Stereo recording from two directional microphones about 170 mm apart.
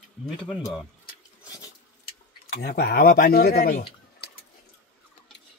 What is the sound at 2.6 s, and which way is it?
Speech, 60° left (ahead or behind).